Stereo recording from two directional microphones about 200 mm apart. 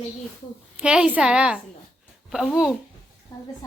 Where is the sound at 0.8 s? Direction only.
5° right (ahead or behind).